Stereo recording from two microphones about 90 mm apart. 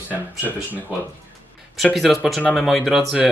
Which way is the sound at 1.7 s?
Centre (ahead or behind).